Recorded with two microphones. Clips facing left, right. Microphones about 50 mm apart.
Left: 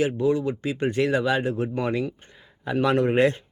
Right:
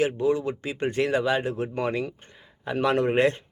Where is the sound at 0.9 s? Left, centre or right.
Right.